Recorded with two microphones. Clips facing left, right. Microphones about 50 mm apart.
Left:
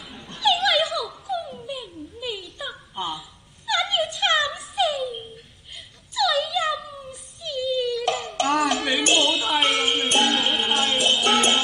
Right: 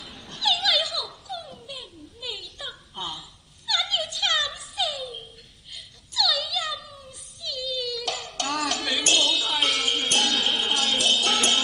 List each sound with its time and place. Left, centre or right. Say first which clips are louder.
0.0 s dog: left 5 dB; centre
1.0 s dog: left 7 dB; centre
1.8 s a sound: left 6 dB; left
3.6 s music: left 4 dB; left
4.7 s a sound: left 7 dB; centre
7.4 s music: left 7 dB; left
8.0 s a sound: left 7 dB; centre
8.5 s music: left 4 dB; centre
8.9 s music: left 1 dB; left
9.5 s music: left 4 dB; centre
11.2 s music: left 4 dB; left